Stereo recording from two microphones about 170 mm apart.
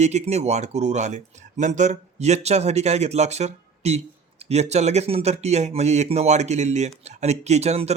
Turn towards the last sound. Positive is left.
turn(degrees=-40)  # may be behind; listen again after turning